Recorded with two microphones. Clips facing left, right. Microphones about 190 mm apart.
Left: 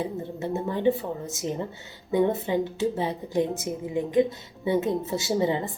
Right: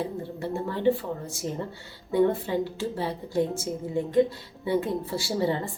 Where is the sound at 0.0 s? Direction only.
20° left (ahead or behind).